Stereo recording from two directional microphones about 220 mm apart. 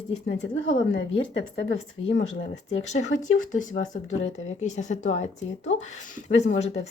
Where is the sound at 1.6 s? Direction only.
55° left (ahead or behind).